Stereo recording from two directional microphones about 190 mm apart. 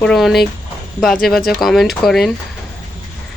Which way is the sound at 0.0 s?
Centre (ahead or behind).